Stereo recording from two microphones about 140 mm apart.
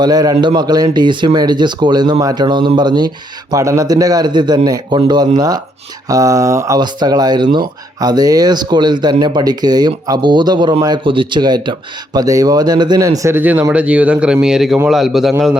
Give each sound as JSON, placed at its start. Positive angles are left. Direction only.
{"t": 0.0, "sound": "a man's voice", "side_deg": -25}